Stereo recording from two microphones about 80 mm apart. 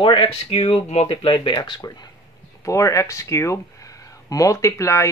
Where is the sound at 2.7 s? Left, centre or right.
Left.